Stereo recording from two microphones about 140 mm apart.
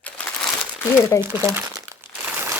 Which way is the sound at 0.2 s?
10° left (ahead or behind).